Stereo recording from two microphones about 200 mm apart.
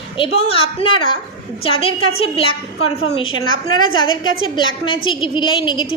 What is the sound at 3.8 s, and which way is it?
Speech, 90° left.